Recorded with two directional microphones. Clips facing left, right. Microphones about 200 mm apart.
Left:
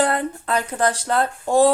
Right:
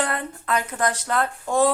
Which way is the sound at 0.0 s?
30° left (ahead or behind).